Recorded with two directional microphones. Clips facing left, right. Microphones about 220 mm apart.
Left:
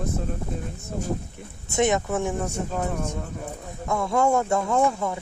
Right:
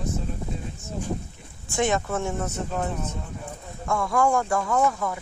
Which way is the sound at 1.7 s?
20° left (ahead or behind).